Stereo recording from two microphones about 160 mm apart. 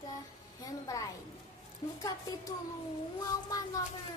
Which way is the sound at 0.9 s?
20° left (ahead or behind).